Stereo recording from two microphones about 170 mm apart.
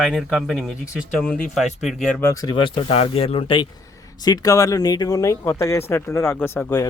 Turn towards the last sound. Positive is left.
turn(degrees=15)  # may be behind; listen again after turning